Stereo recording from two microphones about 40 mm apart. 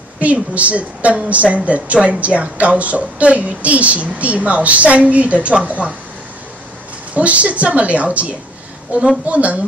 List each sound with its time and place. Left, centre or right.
0.2 s a woman's voice: right
7.2 s a woman's voice: right